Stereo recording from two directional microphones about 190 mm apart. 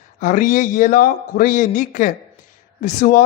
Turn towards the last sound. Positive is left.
turn(degrees=45)  # may be behind; listen again after turning